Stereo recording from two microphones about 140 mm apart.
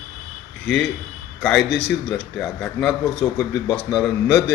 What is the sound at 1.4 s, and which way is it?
A man's voice, centre (ahead or behind).